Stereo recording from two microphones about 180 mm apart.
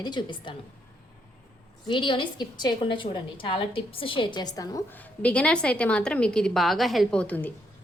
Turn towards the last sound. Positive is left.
turn(degrees=10)  # may be behind; listen again after turning